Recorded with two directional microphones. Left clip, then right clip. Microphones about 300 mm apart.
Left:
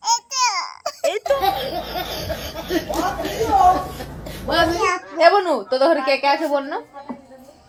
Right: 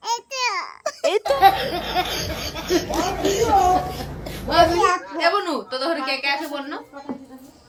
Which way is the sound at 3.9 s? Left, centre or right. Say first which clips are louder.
Right 1 dB; centre.